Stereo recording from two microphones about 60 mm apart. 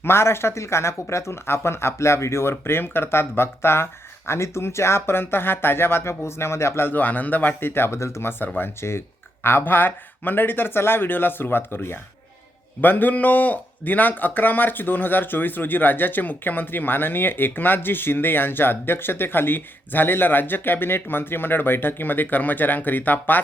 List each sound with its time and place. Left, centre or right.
0.0 s speech: left
6.8 s a man's voice: left
7.9 s a man's voice: left